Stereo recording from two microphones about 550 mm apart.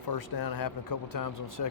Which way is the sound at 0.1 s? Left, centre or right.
Left.